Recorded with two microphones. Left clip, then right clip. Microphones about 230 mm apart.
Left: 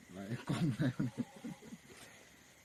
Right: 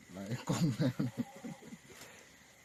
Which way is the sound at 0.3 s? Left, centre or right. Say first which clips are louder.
Right 3 dB; right.